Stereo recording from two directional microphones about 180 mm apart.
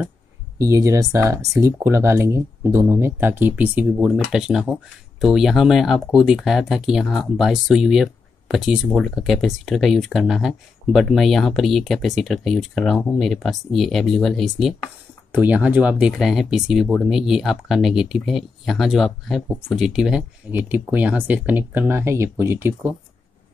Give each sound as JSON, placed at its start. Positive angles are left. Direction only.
{"t": 0.6, "sound": "speech", "side_deg": -20}